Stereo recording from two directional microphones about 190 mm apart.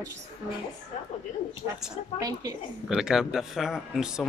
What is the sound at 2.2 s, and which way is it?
Speech, 20° right (ahead or behind).